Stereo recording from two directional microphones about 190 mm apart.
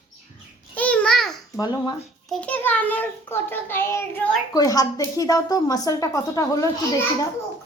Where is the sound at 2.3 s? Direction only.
5° left (ahead or behind).